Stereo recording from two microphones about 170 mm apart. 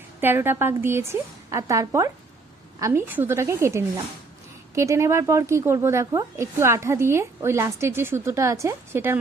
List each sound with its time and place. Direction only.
0.2 s speech: 10° right (ahead or behind)